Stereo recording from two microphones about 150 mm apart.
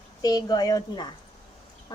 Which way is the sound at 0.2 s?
25° left (ahead or behind).